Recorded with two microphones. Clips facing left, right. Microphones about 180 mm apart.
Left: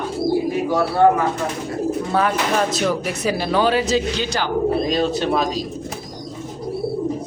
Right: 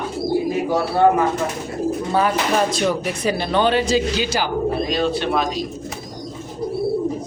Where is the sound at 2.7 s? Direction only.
Centre (ahead or behind).